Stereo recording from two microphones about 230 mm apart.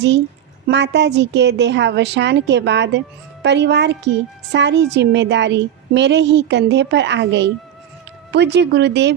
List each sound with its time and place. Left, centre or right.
0.7 s a woman's voice: right